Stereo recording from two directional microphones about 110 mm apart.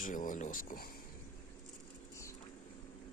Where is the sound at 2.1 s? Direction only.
25° left (ahead or behind).